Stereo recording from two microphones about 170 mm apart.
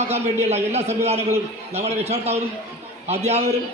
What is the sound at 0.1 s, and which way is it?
A man's voice, 40° right (ahead or behind).